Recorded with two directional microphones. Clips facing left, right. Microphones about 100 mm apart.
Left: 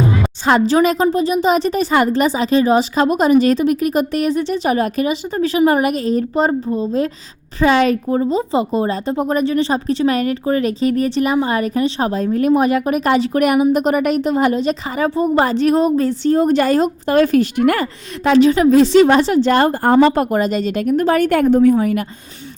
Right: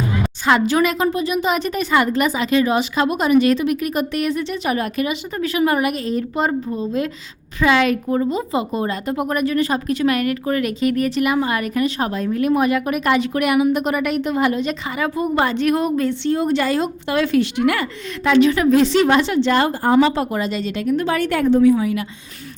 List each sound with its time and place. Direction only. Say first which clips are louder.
0.1 s a woman's voice: left 2 dB; 35° left (ahead or behind)
18.3 s a woman's voice: left 3 dB; 35° left (ahead or behind)